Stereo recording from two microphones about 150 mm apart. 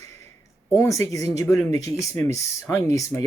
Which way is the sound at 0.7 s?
20° left (ahead or behind).